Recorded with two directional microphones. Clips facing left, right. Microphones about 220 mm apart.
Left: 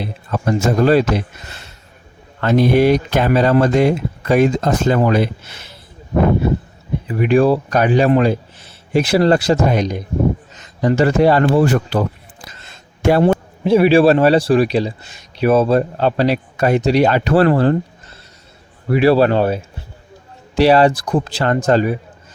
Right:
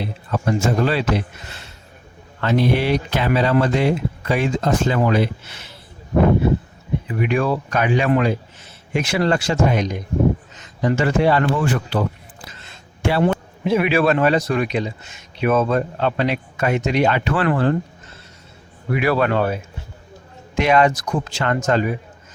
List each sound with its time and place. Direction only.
0.4 s speech: 45° left (ahead or behind)
2.4 s speech: 45° left (ahead or behind)
7.1 s speech: 35° left (ahead or behind)
13.7 s speech: 30° left (ahead or behind)
18.9 s speech: 30° left (ahead or behind)
20.6 s speech: 35° left (ahead or behind)